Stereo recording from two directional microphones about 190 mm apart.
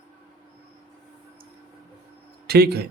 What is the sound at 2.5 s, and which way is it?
Speech, 55° right (ahead or behind).